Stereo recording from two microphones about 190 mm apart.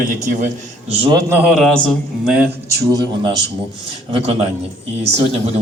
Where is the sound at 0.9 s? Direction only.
30° right (ahead or behind).